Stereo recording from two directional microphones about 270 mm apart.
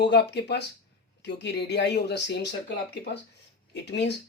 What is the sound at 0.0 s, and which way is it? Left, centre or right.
Speech, left.